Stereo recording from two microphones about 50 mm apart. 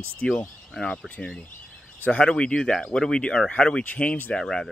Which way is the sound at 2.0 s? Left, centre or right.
Left.